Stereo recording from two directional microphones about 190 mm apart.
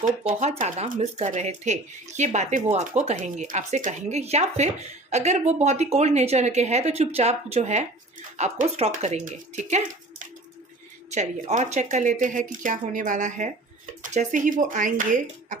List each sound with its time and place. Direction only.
0.3 s speech: 40° right (ahead or behind)
11.1 s speech: 40° right (ahead or behind)